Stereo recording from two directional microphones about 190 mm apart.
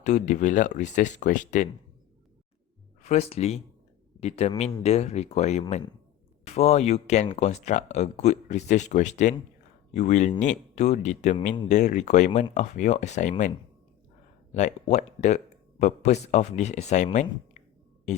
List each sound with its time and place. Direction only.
0.0 s speech: 40° left (ahead or behind)
3.0 s speech: 35° left (ahead or behind)
14.5 s speech: 40° left (ahead or behind)